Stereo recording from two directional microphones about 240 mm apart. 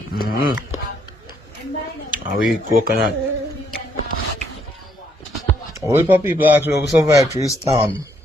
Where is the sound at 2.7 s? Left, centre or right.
Right.